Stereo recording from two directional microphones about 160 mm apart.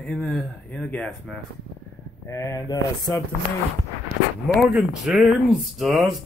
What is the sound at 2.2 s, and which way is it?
Speech, 20° left (ahead or behind).